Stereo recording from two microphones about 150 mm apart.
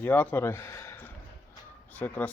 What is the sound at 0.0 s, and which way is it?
Speech, 10° left (ahead or behind).